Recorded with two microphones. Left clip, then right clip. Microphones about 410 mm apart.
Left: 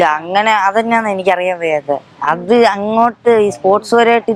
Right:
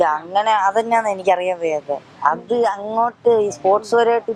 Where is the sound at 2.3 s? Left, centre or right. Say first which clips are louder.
Left 7 dB; left.